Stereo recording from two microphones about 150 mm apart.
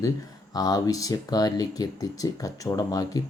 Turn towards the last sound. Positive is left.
turn(degrees=25)  # may be behind; listen again after turning